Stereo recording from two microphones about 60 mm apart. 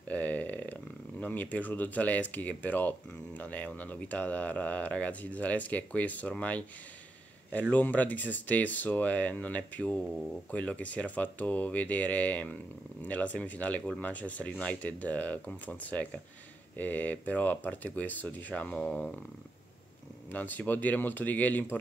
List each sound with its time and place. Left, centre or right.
0.1 s a sound: left
1.2 s speech: left
7.7 s speech: left
20.2 s speech: left